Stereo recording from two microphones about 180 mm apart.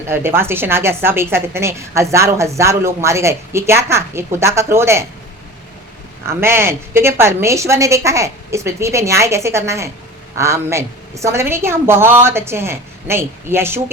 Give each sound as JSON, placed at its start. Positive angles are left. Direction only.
{"t": 0.1, "sound": "a woman's voice", "side_deg": -15}
{"t": 6.2, "sound": "a woman's voice", "side_deg": -15}